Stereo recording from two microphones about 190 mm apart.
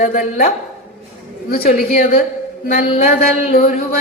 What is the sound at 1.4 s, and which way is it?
Speech, 55° left (ahead or behind).